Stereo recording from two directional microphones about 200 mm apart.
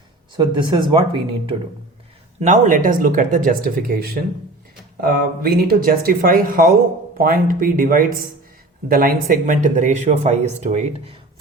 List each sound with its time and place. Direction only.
0.3 s speech: 20° right (ahead or behind)
2.4 s speech: 40° right (ahead or behind)